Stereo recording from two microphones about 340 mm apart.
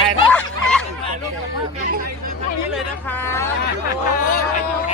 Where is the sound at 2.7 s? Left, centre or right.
Centre.